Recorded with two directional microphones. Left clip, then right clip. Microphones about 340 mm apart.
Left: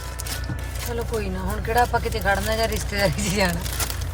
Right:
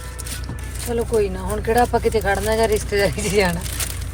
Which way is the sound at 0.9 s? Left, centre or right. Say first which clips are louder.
Right 9 dB; right.